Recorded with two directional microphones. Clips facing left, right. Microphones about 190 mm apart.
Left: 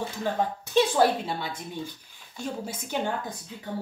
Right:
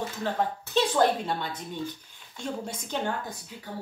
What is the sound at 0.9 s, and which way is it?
Speech, 10° left (ahead or behind).